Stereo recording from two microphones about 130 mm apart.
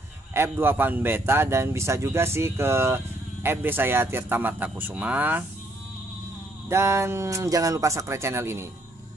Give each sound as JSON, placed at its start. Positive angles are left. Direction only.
{"t": 0.3, "sound": "speech", "side_deg": -15}
{"t": 6.7, "sound": "speech", "side_deg": -20}